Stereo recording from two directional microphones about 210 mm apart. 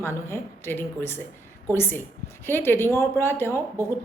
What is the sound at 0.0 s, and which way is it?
A woman's voice, 10° left (ahead or behind).